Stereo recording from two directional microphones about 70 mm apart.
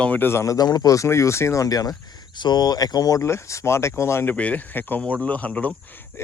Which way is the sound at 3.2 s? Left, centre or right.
Left.